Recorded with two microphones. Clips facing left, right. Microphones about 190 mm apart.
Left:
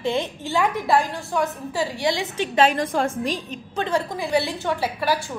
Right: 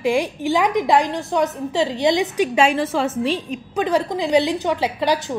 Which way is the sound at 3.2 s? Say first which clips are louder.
Right 5 dB; 40° left (ahead or behind).